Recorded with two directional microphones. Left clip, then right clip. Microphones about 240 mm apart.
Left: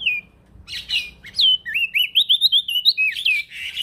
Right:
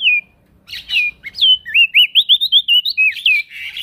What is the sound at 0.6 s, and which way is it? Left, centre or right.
Bird, right.